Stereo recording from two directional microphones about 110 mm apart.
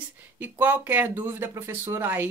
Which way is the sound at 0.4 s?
15° right (ahead or behind).